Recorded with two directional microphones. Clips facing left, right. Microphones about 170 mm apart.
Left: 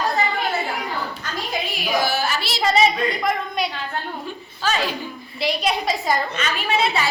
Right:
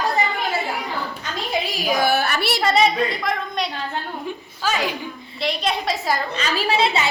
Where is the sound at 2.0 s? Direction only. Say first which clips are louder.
Right 3 dB; 60° right (ahead or behind).